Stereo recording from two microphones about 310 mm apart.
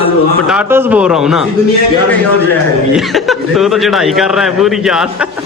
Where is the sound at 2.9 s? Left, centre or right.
Centre.